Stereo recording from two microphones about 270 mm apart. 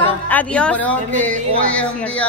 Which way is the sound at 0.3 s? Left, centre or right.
Centre.